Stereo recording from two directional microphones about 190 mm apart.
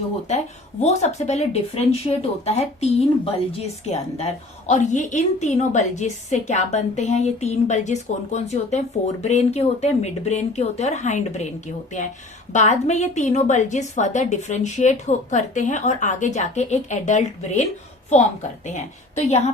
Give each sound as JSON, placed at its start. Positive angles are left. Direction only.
{"t": 0.3, "sound": "a woman's voice", "side_deg": 35}
{"t": 12.5, "sound": "a woman's voice", "side_deg": 40}